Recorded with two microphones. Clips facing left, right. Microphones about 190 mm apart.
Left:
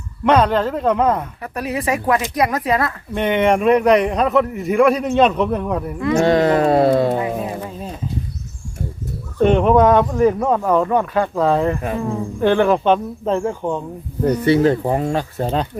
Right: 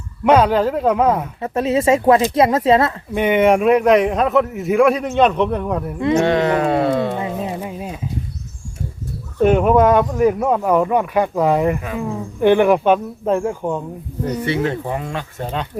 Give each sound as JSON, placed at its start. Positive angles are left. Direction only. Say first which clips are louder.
{"t": 0.3, "sound": "speech", "louder": "right 2 dB", "side_deg": -5}
{"t": 1.4, "sound": "speech", "louder": "right 6 dB", "side_deg": -25}
{"t": 3.2, "sound": "a man's voice", "louder": "right 2 dB", "side_deg": -10}
{"t": 6.1, "sound": "speech", "louder": "left 3 dB", "side_deg": 35}
{"t": 7.4, "sound": "a sound", "louder": "right 1 dB", "side_deg": -15}
{"t": 9.4, "sound": "speech", "louder": "even", "side_deg": -5}
{"t": 14.4, "sound": "speech", "louder": "left 7 dB", "side_deg": 35}